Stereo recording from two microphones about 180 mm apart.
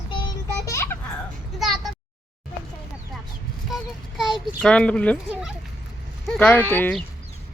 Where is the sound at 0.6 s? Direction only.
15° left (ahead or behind).